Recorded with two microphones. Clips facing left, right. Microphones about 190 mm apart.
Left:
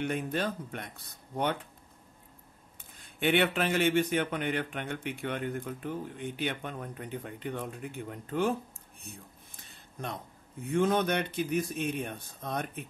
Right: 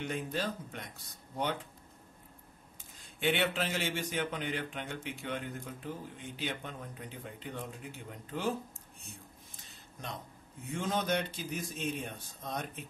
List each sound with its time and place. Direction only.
0.0 s a man's voice: 60° left (ahead or behind)
3.2 s a man's voice: 55° left (ahead or behind)
10.6 s a man's voice: 60° left (ahead or behind)